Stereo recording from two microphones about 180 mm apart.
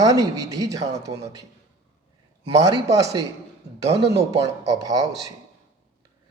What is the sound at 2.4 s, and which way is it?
Speech, 30° right (ahead or behind).